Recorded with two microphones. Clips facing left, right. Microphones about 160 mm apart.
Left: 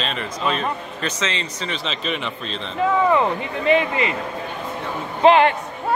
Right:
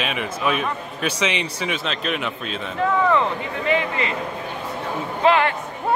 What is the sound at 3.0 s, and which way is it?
Speech, 20° left (ahead or behind).